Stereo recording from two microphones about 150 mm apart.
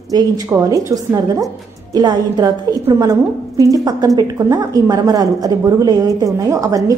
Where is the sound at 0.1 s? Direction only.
25° right (ahead or behind).